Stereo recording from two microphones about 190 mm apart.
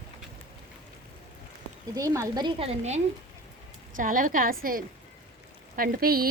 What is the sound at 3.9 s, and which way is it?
Speech, 45° right (ahead or behind).